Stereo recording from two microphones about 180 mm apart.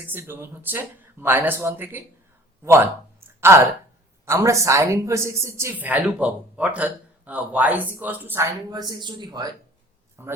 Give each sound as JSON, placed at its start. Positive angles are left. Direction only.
{"t": 0.0, "sound": "speech", "side_deg": -10}
{"t": 8.7, "sound": "speech", "side_deg": -20}